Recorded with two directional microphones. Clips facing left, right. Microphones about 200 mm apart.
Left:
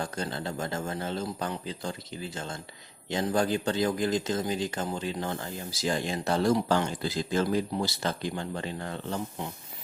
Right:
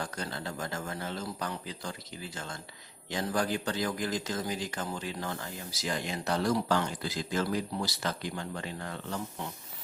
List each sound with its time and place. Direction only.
0.0 s speech: 25° left (ahead or behind)